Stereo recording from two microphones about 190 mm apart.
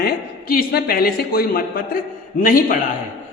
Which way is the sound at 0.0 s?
50° left (ahead or behind).